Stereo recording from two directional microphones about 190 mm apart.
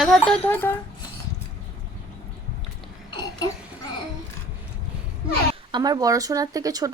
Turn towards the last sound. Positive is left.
turn(degrees=-20)  # may be behind; listen again after turning